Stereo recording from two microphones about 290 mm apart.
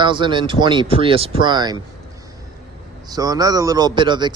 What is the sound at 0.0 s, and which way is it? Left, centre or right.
A man's voice, centre.